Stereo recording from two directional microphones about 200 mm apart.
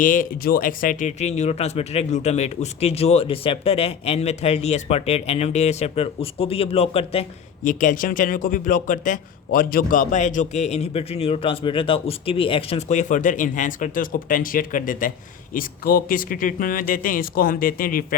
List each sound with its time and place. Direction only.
0.0 s a man's voice: 40° left (ahead or behind)
7.6 s a man's voice: 40° left (ahead or behind)